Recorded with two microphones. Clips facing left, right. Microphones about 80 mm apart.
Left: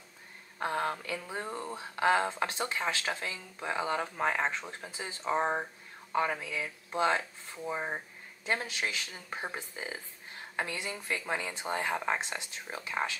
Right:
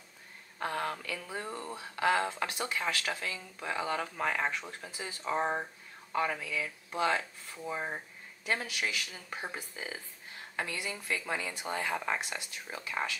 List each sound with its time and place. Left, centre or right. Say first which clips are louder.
0.6 s speech: left 2 dB; left